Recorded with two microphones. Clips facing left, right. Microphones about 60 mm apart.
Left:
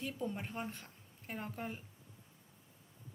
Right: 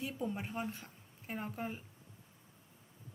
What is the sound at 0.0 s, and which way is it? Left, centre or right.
Speech, centre.